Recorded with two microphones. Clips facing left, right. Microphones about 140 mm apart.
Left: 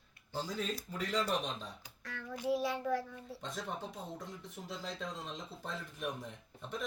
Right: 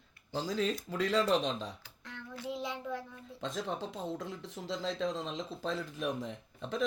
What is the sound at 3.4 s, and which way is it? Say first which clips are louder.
Speech: right 6 dB; 90° right.